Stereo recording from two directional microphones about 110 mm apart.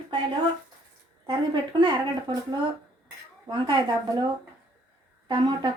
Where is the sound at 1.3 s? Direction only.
45° right (ahead or behind).